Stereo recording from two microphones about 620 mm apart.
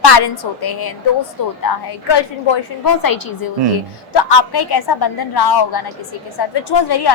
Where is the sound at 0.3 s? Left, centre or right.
Left.